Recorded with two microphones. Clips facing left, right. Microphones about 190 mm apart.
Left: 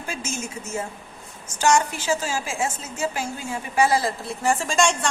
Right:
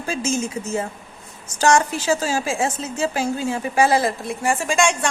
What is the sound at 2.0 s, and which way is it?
Speech, 35° right (ahead or behind).